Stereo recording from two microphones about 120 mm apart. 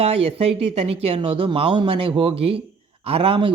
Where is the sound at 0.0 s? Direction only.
55° right (ahead or behind).